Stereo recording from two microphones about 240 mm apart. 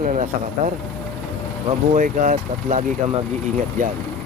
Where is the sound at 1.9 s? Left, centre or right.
Right.